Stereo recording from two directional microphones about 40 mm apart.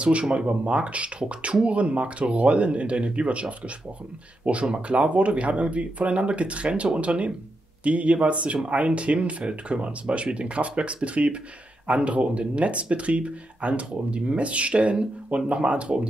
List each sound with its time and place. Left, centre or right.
0.0 s speech: right